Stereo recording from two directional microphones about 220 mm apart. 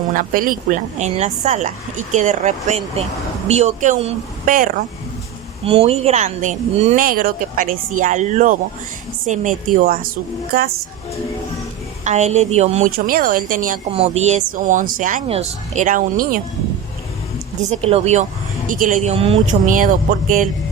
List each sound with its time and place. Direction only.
0.1 s speech: 40° right (ahead or behind)
5.6 s speech: 25° right (ahead or behind); by 10.7 s 45° right (ahead or behind)
12.0 s speech: 30° right (ahead or behind)
13.9 s speech: 30° right (ahead or behind)
17.7 s speech: 30° right (ahead or behind)